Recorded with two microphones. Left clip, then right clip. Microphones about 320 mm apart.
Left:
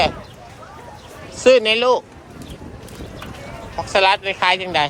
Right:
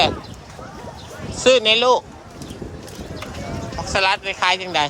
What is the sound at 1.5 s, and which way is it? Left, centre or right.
Speech, centre.